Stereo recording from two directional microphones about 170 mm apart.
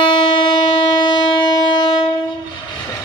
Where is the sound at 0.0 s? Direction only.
25° left (ahead or behind).